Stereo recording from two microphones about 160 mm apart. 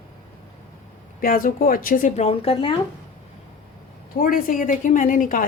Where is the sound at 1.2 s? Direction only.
60° left (ahead or behind).